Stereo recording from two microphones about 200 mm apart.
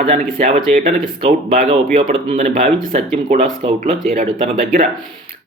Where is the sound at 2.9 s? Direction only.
40° right (ahead or behind).